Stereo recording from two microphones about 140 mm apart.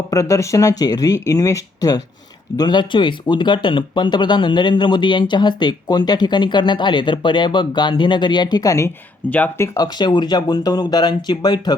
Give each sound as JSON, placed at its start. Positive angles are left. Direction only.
{"t": 0.1, "sound": "speech", "side_deg": 25}
{"t": 9.3, "sound": "speech", "side_deg": 10}
{"t": 9.7, "sound": "speech", "side_deg": 30}